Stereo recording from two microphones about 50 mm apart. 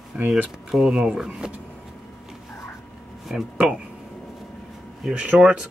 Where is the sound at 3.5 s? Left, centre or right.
Right.